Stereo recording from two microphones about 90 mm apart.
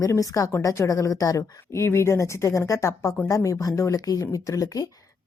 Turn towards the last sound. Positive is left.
turn(degrees=40)  # may be behind; listen again after turning